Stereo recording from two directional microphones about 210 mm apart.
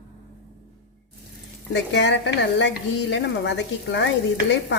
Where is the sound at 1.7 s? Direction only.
55° left (ahead or behind).